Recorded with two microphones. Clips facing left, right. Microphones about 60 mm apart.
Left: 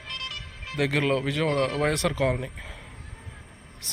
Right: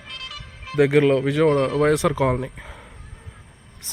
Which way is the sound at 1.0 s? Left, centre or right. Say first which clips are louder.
Right 8 dB; centre.